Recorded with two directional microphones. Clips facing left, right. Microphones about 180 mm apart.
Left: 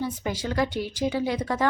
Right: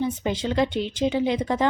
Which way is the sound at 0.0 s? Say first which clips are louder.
Right 4 dB; 20° right (ahead or behind).